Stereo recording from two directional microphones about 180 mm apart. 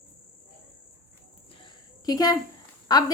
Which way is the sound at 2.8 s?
20° left (ahead or behind).